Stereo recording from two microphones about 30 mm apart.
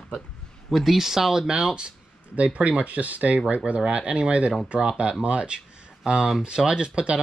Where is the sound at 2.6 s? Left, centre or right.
Right.